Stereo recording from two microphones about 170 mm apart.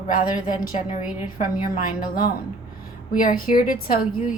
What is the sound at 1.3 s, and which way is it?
A woman's voice, 55° left (ahead or behind).